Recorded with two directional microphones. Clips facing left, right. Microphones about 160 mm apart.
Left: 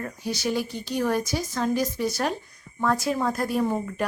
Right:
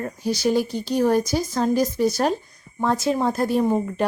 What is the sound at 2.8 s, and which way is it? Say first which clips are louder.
A woman's voice: right 3 dB; 25° right (ahead or behind).